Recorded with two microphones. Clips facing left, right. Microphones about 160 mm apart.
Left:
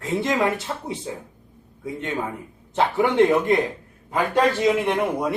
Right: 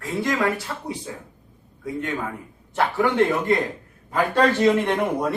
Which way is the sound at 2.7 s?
20° left (ahead or behind).